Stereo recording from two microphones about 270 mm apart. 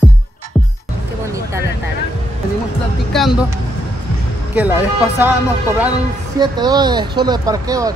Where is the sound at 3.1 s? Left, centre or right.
Centre.